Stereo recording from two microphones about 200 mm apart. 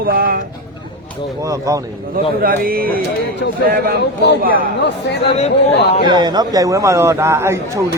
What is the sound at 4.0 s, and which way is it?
Speech, 55° left (ahead or behind).